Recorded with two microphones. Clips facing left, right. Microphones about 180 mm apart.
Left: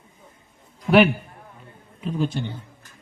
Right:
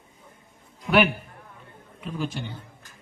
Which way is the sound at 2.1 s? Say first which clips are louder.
Left 5 dB; 35° left (ahead or behind).